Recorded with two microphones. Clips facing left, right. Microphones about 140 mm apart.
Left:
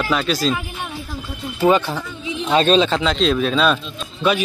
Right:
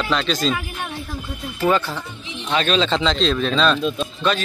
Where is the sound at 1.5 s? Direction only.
20° left (ahead or behind).